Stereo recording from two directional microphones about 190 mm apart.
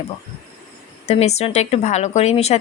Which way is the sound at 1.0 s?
35° left (ahead or behind).